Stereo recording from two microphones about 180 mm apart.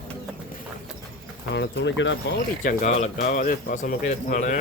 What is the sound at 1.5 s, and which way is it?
Speech, 70° left (ahead or behind).